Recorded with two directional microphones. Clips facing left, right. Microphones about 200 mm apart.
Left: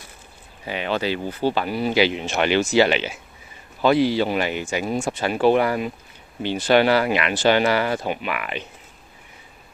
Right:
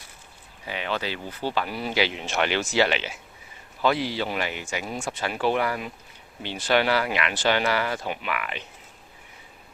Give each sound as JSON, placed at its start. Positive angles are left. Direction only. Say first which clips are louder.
{"t": 0.7, "sound": "speech", "louder": "left 6 dB", "side_deg": 25}
{"t": 1.7, "sound": "speech", "louder": "left 6 dB", "side_deg": 10}
{"t": 4.2, "sound": "speech", "louder": "left 7 dB", "side_deg": 25}
{"t": 8.1, "sound": "speech", "louder": "left 4 dB", "side_deg": 20}